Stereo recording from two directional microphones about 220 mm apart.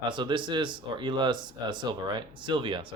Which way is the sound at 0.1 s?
20° right (ahead or behind).